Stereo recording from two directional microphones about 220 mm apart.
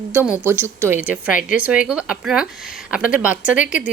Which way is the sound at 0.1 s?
10° right (ahead or behind).